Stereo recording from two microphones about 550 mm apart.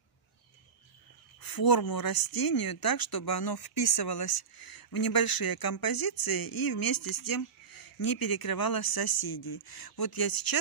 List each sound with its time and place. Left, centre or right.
1.4 s speech: left